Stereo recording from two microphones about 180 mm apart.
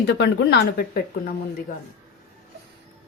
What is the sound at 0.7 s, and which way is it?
Speech, 55° left (ahead or behind).